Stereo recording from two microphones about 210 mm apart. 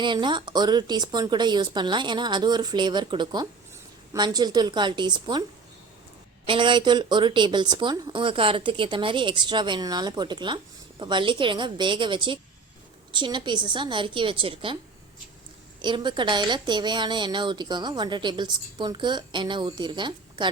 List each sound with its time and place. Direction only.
0.0 s a woman's voice: 20° right (ahead or behind)
6.4 s a woman's voice: 25° right (ahead or behind)
15.8 s a woman's voice: 20° right (ahead or behind)